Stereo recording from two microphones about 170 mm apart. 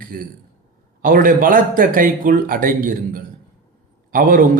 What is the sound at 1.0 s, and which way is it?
A man's voice, 55° right (ahead or behind).